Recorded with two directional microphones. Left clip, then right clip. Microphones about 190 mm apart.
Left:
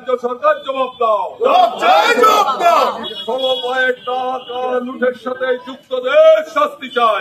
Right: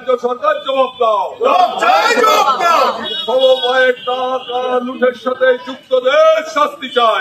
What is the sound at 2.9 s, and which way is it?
A man's voice, 35° left (ahead or behind).